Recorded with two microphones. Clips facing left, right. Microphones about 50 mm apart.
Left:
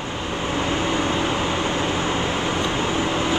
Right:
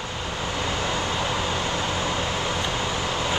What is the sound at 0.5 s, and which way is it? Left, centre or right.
Vehicle, left.